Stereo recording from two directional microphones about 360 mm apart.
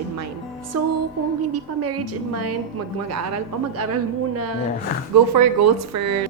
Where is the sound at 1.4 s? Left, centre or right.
Right.